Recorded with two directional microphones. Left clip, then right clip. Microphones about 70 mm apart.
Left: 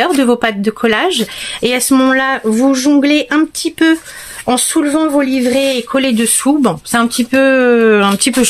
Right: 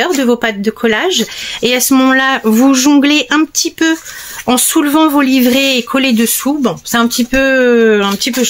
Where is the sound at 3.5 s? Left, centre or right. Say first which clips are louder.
Left 1 dB; left.